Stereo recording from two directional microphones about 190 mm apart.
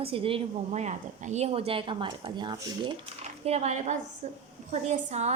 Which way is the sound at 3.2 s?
35° right (ahead or behind).